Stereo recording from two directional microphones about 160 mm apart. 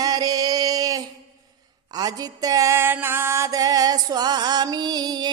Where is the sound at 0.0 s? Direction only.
25° right (ahead or behind).